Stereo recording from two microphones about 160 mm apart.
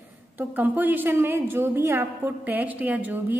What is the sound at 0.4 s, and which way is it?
A woman's voice, 10° right (ahead or behind).